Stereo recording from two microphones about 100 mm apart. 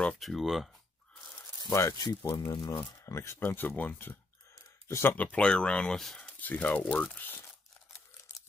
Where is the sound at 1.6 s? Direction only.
35° left (ahead or behind).